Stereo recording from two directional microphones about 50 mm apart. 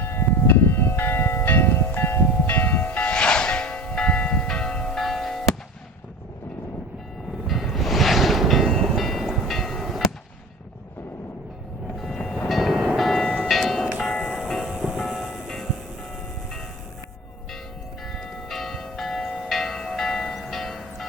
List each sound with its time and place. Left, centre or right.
0.0 s church bell: left
3.0 s church bell: left
7.4 s music: centre
9.2 s train: centre
11.9 s train: centre
12.5 s train: centre
13.1 s train: centre
13.5 s music: centre
18.0 s church bell: centre
20.3 s train: centre